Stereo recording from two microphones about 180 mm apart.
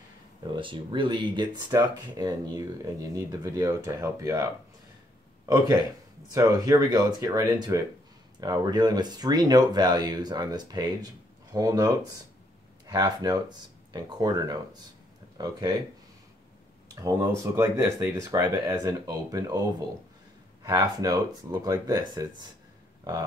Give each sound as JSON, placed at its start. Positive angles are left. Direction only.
{"t": 0.4, "sound": "speech", "side_deg": -25}
{"t": 6.3, "sound": "speech", "side_deg": -20}
{"t": 16.9, "sound": "speech", "side_deg": -20}
{"t": 20.6, "sound": "speech", "side_deg": -20}